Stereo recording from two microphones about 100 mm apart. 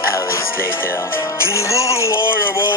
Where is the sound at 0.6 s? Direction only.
20° left (ahead or behind).